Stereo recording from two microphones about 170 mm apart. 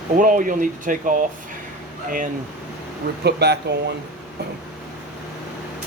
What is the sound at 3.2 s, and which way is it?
Speech, 75° right (ahead or behind).